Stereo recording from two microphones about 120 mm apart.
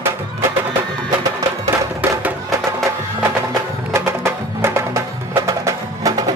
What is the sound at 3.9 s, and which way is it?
Music, 20° right (ahead or behind).